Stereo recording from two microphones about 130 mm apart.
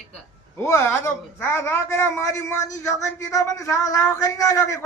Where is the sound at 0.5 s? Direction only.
20° left (ahead or behind).